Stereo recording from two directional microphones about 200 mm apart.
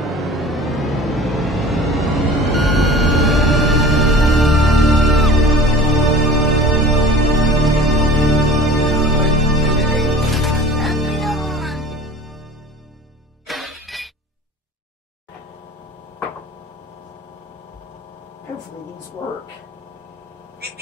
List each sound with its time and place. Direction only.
0.0 s vehicle: centre (ahead or behind)
7.0 s music: centre (ahead or behind)
13.5 s music: centre (ahead or behind)
20.6 s vehicle: 55° right (ahead or behind)